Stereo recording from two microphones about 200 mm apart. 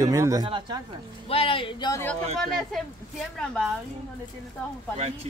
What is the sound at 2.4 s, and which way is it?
Speech, centre (ahead or behind).